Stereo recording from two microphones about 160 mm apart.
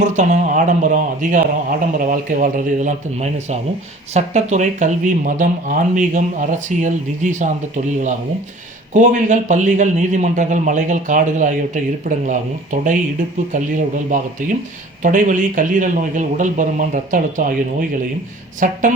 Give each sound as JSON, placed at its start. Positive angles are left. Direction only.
{"t": 0.0, "sound": "a man's voice", "side_deg": -50}
{"t": 8.9, "sound": "a man's voice", "side_deg": -50}